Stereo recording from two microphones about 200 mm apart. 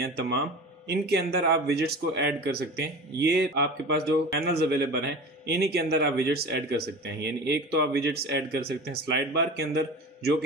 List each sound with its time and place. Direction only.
0.0 s speech: 55° right (ahead or behind)